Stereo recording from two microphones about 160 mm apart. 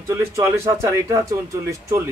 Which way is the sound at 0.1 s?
15° right (ahead or behind).